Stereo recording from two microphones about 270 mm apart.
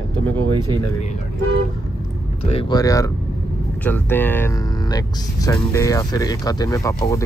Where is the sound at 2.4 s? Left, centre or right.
Left.